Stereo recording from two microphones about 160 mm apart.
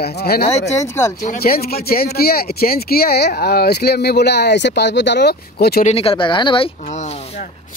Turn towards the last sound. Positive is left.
turn(degrees=30)  # may be behind; listen again after turning